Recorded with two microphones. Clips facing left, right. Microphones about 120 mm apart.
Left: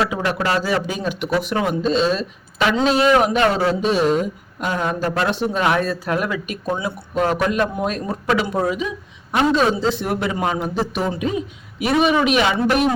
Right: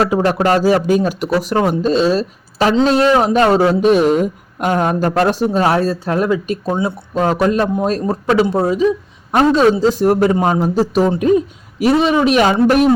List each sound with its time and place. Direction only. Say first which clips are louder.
0.0 s speech: right 6 dB; 40° right (ahead or behind)
3.7 s speech: right 6 dB; 50° right (ahead or behind)